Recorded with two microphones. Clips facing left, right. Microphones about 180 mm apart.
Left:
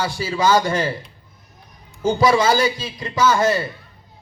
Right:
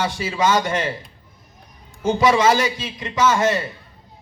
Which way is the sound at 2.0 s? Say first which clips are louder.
Even; 30° left (ahead or behind).